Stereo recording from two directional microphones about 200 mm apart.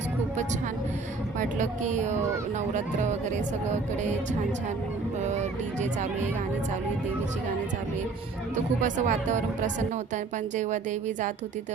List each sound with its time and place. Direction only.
1.4 s speech: 40° right (ahead or behind)
5.3 s speech: 35° right (ahead or behind)
8.8 s speech: 40° right (ahead or behind)